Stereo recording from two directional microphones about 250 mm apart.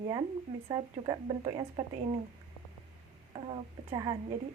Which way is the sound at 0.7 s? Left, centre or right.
Centre.